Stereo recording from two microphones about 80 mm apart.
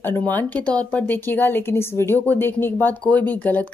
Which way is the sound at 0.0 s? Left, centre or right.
Left.